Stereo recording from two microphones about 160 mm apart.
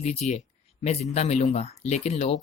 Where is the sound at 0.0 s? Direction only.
45° left (ahead or behind).